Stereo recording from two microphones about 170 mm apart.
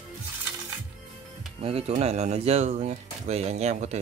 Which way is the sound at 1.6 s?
35° right (ahead or behind).